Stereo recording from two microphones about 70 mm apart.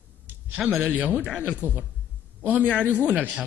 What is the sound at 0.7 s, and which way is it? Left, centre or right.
Speech, right.